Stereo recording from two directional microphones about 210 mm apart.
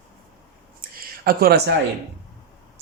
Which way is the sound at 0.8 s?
45° right (ahead or behind).